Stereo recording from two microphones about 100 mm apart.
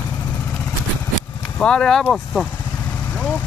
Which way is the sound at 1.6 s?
5° left (ahead or behind).